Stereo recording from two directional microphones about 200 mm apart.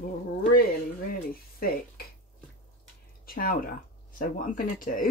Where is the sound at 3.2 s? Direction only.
50° left (ahead or behind).